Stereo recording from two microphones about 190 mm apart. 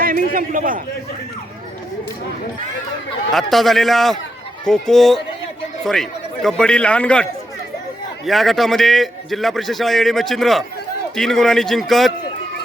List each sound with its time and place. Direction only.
0.0 s a man's voice: 45° right (ahead or behind)
3.3 s a man's voice: centre (ahead or behind)